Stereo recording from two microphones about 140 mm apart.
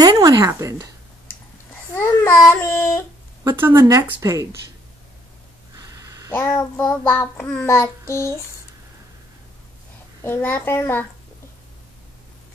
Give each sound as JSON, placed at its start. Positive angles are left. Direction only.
{"t": 0.0, "sound": "speech", "side_deg": -30}
{"t": 2.0, "sound": "speech", "side_deg": 15}
{"t": 3.4, "sound": "speech", "side_deg": -15}
{"t": 6.3, "sound": "child singing", "side_deg": 15}
{"t": 8.1, "sound": "speech", "side_deg": 20}
{"t": 10.2, "sound": "child singing", "side_deg": 15}